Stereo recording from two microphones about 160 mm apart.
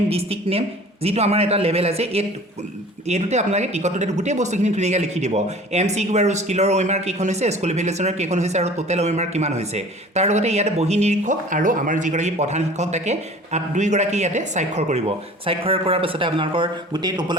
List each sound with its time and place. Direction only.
0.1 s a man's voice: 40° right (ahead or behind)